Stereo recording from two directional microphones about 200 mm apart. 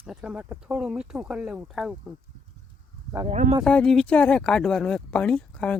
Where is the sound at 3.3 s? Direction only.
30° right (ahead or behind).